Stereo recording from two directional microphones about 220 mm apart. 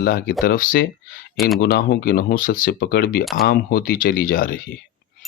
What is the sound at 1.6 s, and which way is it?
Speech, 50° left (ahead or behind).